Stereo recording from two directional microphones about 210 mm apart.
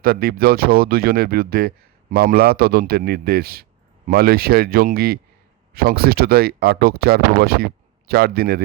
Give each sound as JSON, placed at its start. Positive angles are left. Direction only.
{"t": 0.0, "sound": "speech", "side_deg": -45}